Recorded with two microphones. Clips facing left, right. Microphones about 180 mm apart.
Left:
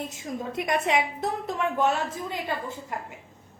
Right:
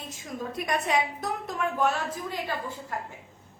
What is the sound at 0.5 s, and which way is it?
A woman's voice, 20° left (ahead or behind).